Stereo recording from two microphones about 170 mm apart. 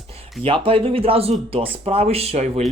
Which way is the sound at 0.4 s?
30° right (ahead or behind).